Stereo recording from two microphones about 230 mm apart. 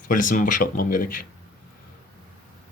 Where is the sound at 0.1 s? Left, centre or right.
Left.